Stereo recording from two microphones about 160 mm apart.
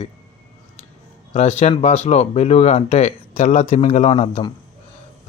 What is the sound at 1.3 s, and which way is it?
Speech, 40° left (ahead or behind).